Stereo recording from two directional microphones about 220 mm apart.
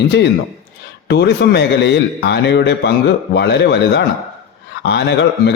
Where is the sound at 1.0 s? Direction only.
50° left (ahead or behind).